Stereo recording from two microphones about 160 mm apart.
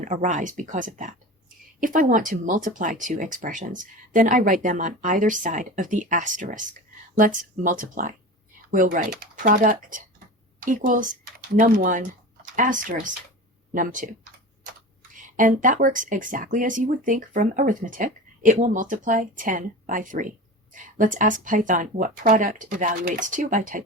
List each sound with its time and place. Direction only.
0.0 s speech: 55° right (ahead or behind)
15.1 s speech: 55° right (ahead or behind)